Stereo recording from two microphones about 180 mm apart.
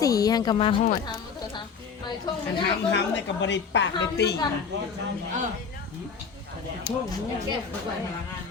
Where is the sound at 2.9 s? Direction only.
80° left.